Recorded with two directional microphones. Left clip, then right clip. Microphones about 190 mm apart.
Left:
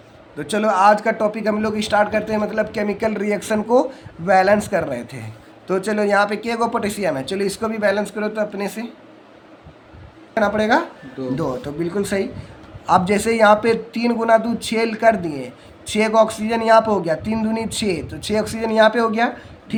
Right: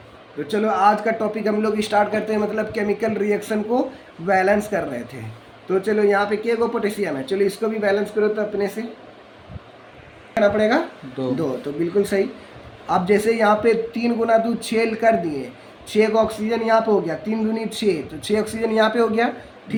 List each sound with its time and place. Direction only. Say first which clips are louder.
0.3 s a man's voice: left 2 dB; 40° left (ahead or behind)
10.3 s a man's voice: even; 35° left (ahead or behind)
11.9 s a man's voice: right 4 dB; 30° left (ahead or behind)